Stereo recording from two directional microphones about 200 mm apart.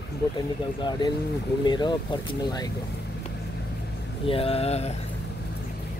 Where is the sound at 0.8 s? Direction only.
20° left (ahead or behind).